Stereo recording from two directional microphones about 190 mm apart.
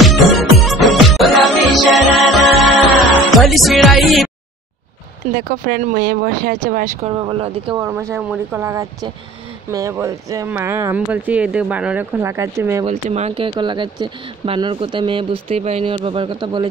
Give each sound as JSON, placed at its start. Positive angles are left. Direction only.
{"t": 0.0, "sound": "music", "side_deg": 0}
{"t": 5.3, "sound": "speech", "side_deg": -50}
{"t": 7.2, "sound": "speech", "side_deg": -25}
{"t": 7.8, "sound": "speech", "side_deg": -15}
{"t": 12.8, "sound": "speech", "side_deg": -35}